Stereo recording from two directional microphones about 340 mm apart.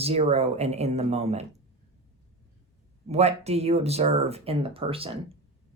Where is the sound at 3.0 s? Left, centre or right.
Centre.